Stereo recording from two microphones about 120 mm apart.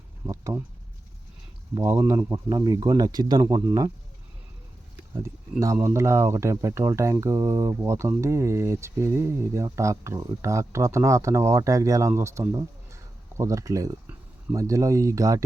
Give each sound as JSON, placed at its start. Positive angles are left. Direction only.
{"t": 0.3, "sound": "speech", "side_deg": -25}
{"t": 1.8, "sound": "speech", "side_deg": -25}
{"t": 5.1, "sound": "speech", "side_deg": -25}